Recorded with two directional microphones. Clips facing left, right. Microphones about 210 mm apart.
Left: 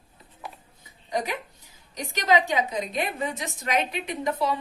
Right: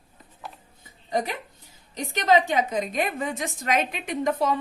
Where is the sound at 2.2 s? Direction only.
50° right (ahead or behind).